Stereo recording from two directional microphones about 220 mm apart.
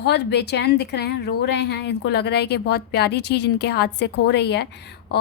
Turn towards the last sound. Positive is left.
turn(degrees=50)  # may be behind; listen again after turning